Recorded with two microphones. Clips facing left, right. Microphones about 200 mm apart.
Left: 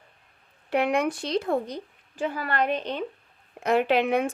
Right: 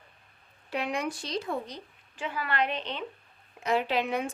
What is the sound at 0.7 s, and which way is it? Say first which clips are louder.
A woman's voice: left 8 dB; 60° left (ahead or behind).